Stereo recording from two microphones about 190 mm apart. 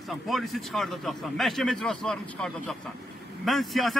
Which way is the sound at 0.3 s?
Centre (ahead or behind).